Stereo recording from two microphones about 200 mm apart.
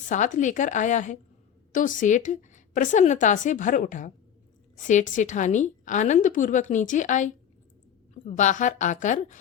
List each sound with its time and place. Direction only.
0.1 s a woman's voice: 40° left (ahead or behind)